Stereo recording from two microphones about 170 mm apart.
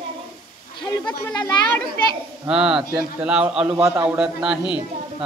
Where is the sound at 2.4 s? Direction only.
5° right (ahead or behind).